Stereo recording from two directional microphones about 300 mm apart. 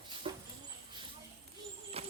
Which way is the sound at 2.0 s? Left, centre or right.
Centre.